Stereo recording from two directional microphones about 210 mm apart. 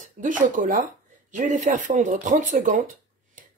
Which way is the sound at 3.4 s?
40° right (ahead or behind).